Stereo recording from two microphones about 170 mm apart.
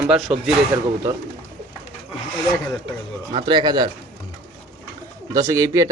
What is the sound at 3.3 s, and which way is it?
Speech, 25° right (ahead or behind).